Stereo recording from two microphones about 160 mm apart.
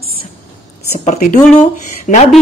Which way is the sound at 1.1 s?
55° left (ahead or behind).